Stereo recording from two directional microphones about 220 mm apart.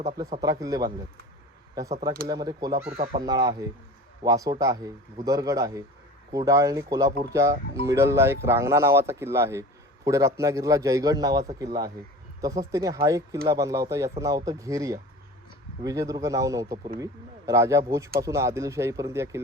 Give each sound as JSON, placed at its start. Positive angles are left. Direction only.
{"t": 0.4, "sound": "speech", "side_deg": -15}